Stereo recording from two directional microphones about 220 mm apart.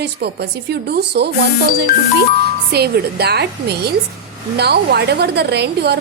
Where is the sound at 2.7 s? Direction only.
45° right (ahead or behind).